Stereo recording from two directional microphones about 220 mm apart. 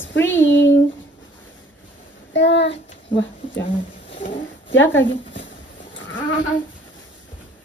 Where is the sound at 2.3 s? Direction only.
55° left (ahead or behind).